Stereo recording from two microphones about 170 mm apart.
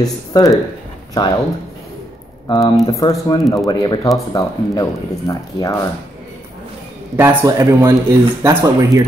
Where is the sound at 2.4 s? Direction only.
20° left (ahead or behind).